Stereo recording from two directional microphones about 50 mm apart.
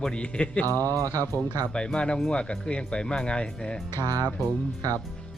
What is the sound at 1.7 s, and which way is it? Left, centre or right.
Speech, centre.